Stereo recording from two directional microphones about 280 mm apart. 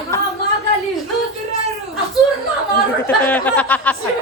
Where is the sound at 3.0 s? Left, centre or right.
Centre.